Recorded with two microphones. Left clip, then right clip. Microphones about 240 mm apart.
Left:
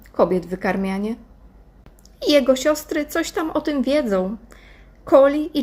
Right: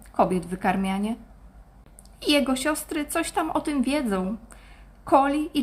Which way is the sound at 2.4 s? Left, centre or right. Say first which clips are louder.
Left 8 dB; centre.